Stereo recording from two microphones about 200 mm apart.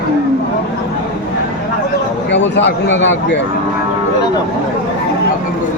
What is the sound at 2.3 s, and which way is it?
Speech, 65° left (ahead or behind).